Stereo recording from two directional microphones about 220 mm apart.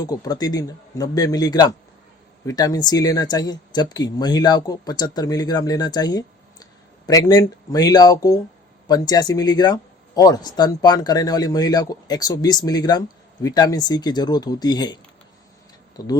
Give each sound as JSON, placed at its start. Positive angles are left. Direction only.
{"t": 0.0, "sound": "speech", "side_deg": 15}
{"t": 16.0, "sound": "speech", "side_deg": 15}